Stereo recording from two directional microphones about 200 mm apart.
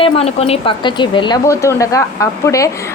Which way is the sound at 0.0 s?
30° left (ahead or behind).